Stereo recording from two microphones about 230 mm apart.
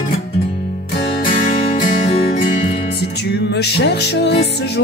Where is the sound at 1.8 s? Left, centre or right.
Left.